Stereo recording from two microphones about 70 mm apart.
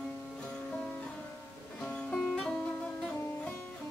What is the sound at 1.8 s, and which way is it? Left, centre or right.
Music, centre.